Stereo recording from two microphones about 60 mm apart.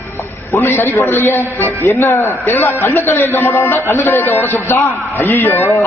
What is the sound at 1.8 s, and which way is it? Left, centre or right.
A man's voice, left.